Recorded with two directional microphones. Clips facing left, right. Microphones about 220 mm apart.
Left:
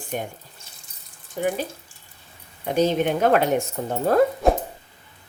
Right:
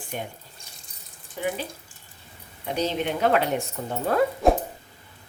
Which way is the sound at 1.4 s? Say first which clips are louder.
Left 4 dB; 45° left (ahead or behind).